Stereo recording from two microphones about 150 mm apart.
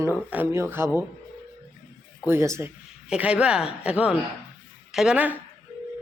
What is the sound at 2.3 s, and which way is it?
Speech, 20° right (ahead or behind).